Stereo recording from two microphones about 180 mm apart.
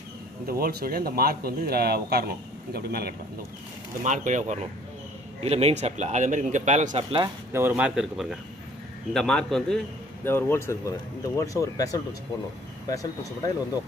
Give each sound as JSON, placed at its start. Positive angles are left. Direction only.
{"t": 0.5, "sound": "speech", "side_deg": -55}
{"t": 4.0, "sound": "a man's voice", "side_deg": -45}
{"t": 7.5, "sound": "a man's voice", "side_deg": -10}